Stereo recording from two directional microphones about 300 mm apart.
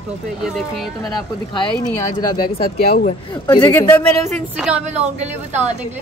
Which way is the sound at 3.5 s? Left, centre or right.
Centre.